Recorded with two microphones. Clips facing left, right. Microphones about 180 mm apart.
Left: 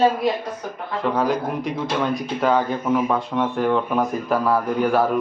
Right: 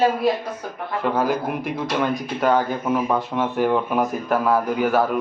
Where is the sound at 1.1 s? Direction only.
5° right (ahead or behind).